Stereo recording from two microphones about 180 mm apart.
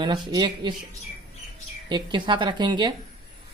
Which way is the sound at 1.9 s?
25° right (ahead or behind).